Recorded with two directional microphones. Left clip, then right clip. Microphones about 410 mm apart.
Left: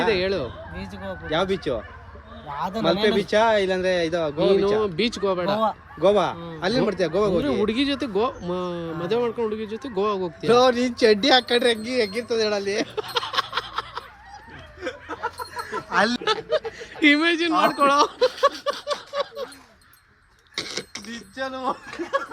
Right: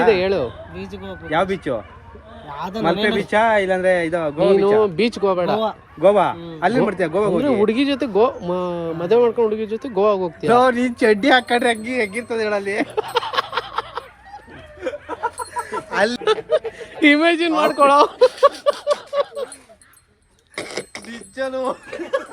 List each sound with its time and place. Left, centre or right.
0.1 s speech: centre
1.3 s a man's voice: centre
2.6 s speech: centre
3.2 s a man's voice: centre
4.8 s speech: centre
6.0 s a man's voice: centre
7.6 s speech: centre
10.5 s a man's voice: centre
12.9 s a sound: centre
15.9 s speech: centre
16.2 s speech: centre
17.5 s a man's voice: centre
17.7 s a sound: centre
21.3 s speech: centre